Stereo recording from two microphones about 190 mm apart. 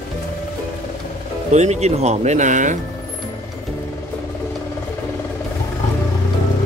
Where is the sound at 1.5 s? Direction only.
35° right (ahead or behind).